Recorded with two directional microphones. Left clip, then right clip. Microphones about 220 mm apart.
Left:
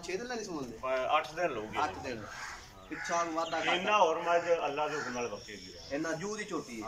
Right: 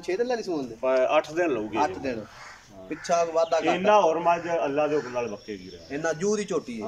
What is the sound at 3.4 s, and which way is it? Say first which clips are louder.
A man's voice: right 9 dB; 50° right (ahead or behind).